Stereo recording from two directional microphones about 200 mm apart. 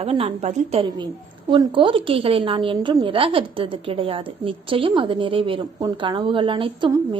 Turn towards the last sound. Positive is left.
turn(degrees=-25)  # may be behind; listen again after turning